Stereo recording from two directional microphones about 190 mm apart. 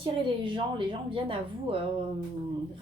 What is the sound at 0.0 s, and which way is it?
A woman's voice, 25° right (ahead or behind).